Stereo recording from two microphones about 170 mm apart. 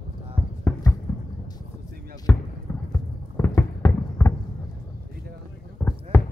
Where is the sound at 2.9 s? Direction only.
15° left (ahead or behind).